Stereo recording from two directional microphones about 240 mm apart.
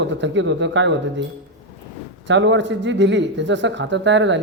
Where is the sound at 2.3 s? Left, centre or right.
Right.